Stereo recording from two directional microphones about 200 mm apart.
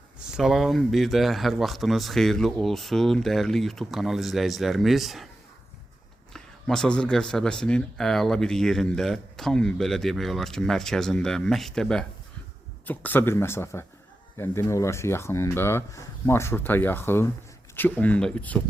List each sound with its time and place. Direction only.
0.2 s speech: centre (ahead or behind)
6.3 s speech: centre (ahead or behind)